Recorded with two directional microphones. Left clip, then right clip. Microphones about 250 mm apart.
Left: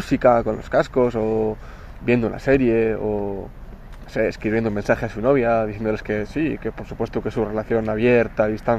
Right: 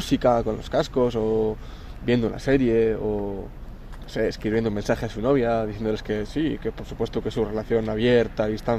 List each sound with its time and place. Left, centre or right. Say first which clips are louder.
0.0 s speech: left 4 dB; centre